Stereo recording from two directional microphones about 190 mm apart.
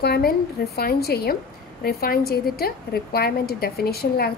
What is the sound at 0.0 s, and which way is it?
A woman's voice, 55° left (ahead or behind).